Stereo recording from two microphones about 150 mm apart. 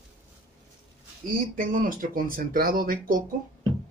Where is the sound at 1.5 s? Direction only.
65° right (ahead or behind).